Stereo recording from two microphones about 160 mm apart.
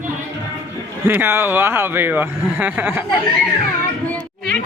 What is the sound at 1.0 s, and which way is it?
Speech, 15° right (ahead or behind).